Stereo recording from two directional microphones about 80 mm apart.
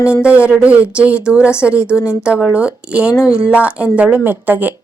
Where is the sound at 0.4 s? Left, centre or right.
Centre.